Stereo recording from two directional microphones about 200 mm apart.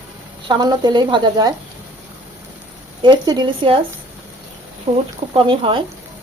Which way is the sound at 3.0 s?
20° right (ahead or behind).